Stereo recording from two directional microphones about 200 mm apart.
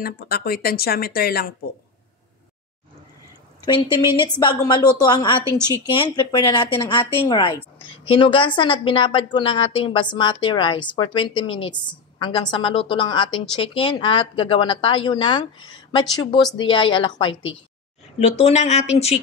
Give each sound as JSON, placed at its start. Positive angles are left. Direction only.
{"t": 0.0, "sound": "speech", "side_deg": 50}
{"t": 4.4, "sound": "a woman's voice", "side_deg": 20}